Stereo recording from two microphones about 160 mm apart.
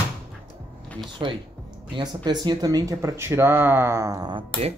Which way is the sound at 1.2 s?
25° right (ahead or behind).